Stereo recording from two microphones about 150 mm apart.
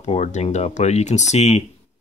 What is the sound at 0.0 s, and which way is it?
Speech, 50° left (ahead or behind).